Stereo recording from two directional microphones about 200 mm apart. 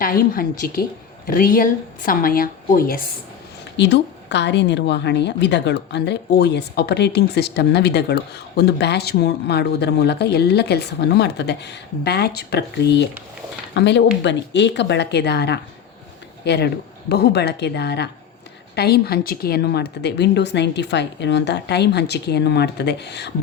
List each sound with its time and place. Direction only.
0.0 s speech: 45° left (ahead or behind)
3.8 s a woman's voice: 60° left (ahead or behind)